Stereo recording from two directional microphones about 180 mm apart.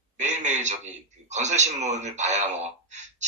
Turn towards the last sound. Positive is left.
turn(degrees=-40)  # may be behind; listen again after turning